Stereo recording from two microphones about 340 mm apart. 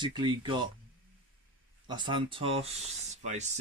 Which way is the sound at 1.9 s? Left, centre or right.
Centre.